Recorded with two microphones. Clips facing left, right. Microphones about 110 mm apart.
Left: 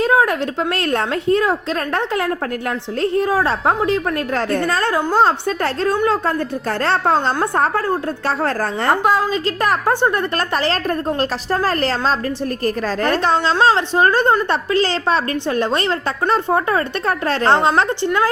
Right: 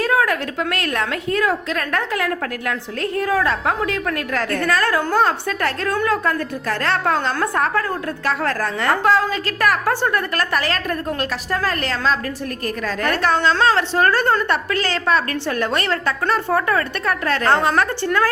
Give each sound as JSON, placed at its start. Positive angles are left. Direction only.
{"t": 0.0, "sound": "a woman's voice", "side_deg": 25}
{"t": 9.0, "sound": "a woman's voice", "side_deg": 20}